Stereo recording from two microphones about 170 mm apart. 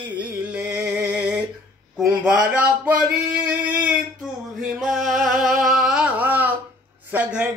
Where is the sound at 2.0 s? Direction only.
5° right (ahead or behind).